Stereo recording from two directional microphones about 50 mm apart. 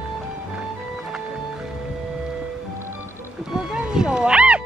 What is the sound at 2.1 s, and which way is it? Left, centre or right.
Music, centre.